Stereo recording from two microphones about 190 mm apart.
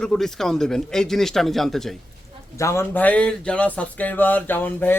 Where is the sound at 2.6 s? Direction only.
15° left (ahead or behind).